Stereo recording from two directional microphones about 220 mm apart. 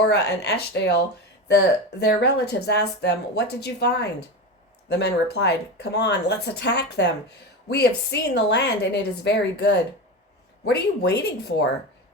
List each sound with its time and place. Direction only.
0.1 s speech: 50° left (ahead or behind)
2.0 s speech: 50° left (ahead or behind)